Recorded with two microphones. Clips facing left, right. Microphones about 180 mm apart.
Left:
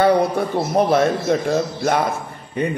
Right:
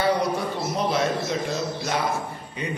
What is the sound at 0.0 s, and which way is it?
A man's voice, 55° left (ahead or behind).